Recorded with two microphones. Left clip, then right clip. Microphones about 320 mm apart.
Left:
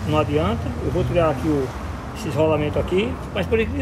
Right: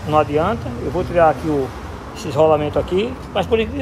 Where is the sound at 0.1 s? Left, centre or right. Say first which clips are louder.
Right 5 dB; centre.